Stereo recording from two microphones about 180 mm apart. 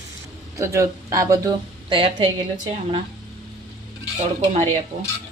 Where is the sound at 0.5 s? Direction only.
15° right (ahead or behind).